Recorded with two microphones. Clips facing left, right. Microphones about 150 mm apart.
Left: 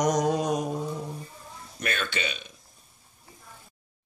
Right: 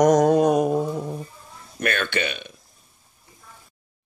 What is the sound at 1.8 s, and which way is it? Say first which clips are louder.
Speech: right 6 dB; 60° right (ahead or behind).